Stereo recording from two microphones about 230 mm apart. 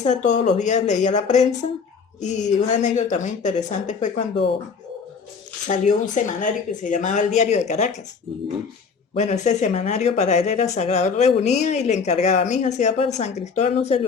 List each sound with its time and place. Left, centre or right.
0.0 s a woman's voice: left
5.6 s a woman's voice: left
9.1 s speech: left